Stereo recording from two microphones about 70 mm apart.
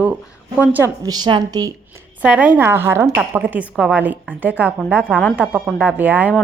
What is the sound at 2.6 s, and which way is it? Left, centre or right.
Speech, right.